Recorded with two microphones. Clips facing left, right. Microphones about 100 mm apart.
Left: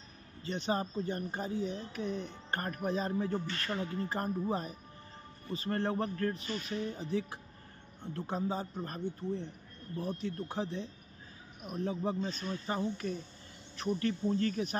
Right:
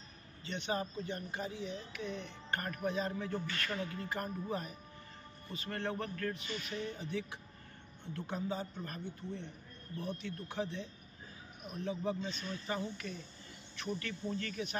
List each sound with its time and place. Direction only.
0.4 s speech: 35° left (ahead or behind)